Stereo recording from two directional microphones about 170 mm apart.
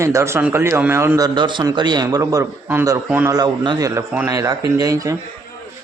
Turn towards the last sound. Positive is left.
turn(degrees=-20)  # may be behind; listen again after turning